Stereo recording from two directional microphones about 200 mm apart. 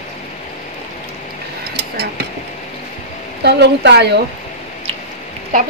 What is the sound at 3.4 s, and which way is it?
Speech, 55° right (ahead or behind).